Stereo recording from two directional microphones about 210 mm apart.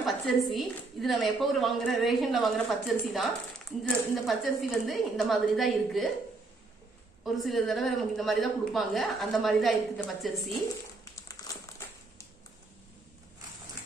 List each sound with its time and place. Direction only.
0.0 s a woman's voice: centre (ahead or behind)
7.2 s a woman's voice: centre (ahead or behind)
11.1 s crumpling: 15° left (ahead or behind)